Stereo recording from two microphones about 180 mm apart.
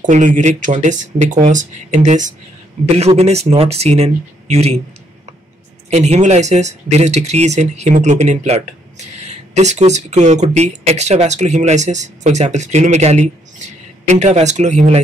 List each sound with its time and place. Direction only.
0.0 s speech: 45° right (ahead or behind)
5.9 s speech: 40° right (ahead or behind)